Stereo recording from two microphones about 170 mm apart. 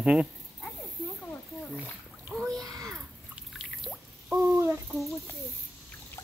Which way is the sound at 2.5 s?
20° right (ahead or behind).